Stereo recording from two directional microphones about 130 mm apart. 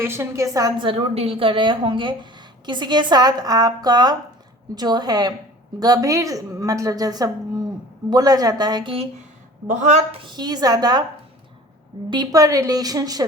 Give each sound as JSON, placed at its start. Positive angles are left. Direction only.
{"t": 0.0, "sound": "a woman's voice", "side_deg": -20}
{"t": 0.8, "sound": "a woman's voice", "side_deg": -45}
{"t": 9.6, "sound": "a woman's voice", "side_deg": -65}
{"t": 10.2, "sound": "speech", "side_deg": -35}
{"t": 12.1, "sound": "a woman's voice", "side_deg": -30}